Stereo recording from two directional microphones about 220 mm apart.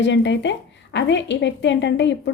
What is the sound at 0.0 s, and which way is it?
Speech, 55° left (ahead or behind).